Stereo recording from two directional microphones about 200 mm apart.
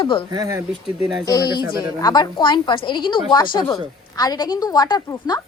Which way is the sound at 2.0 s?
20° left (ahead or behind).